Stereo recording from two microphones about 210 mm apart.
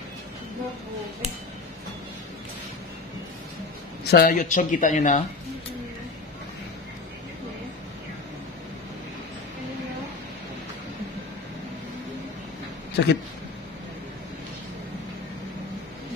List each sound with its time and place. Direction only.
4.0 s speech: 45° left (ahead or behind)
12.9 s speech: 50° left (ahead or behind)